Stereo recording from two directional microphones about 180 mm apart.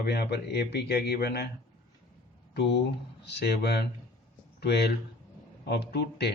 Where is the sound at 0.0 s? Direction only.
65° left (ahead or behind).